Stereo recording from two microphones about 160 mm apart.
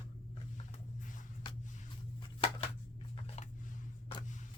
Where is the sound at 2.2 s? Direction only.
30° left (ahead or behind).